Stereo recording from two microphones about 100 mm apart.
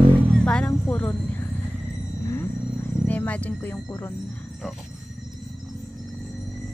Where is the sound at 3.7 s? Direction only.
25° left (ahead or behind).